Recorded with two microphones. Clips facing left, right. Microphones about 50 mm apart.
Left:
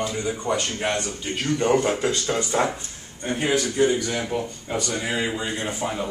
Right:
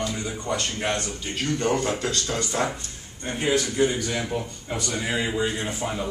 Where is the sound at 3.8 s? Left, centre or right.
Centre.